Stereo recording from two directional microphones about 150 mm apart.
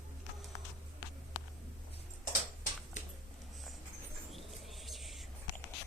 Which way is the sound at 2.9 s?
55° left (ahead or behind).